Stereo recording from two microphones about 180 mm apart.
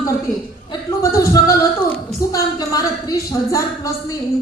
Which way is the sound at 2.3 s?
20° left (ahead or behind).